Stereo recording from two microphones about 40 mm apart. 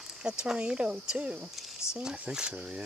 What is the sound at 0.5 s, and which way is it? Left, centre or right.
Speech, right.